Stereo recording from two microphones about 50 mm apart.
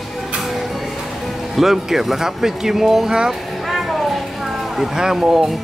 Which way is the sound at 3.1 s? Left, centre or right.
Centre.